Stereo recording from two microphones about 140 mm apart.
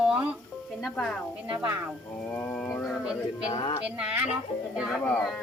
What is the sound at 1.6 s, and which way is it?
Speech, 15° right (ahead or behind).